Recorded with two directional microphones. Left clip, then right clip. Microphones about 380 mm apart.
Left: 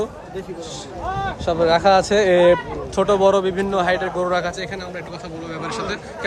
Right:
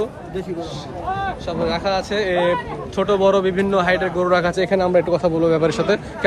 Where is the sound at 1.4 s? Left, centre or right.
Centre.